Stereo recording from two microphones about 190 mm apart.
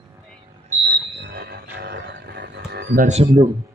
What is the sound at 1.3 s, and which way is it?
Music, 60° right (ahead or behind).